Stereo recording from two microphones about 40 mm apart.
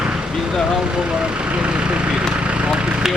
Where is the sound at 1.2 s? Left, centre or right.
Right.